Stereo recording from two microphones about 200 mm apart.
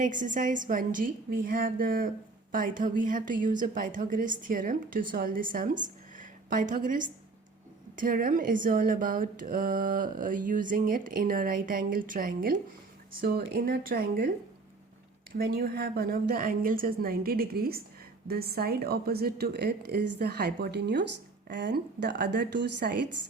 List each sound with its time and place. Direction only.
0.0 s a woman's voice: 40° right (ahead or behind)
15.3 s a woman's voice: 50° right (ahead or behind)